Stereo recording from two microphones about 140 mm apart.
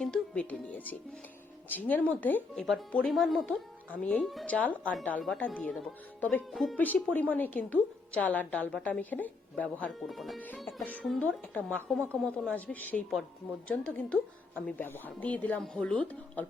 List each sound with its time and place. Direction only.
0.0 s a woman's voice: 5° left (ahead or behind)
6.5 s speech: centre (ahead or behind)
6.7 s a woman's voice: 10° left (ahead or behind)
10.1 s speech: centre (ahead or behind)
10.7 s music: 15° left (ahead or behind)
11.0 s a woman's voice: centre (ahead or behind)